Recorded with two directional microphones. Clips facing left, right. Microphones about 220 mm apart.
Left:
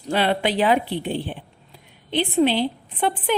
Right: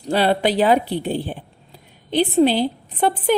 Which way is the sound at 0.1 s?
40° right (ahead or behind).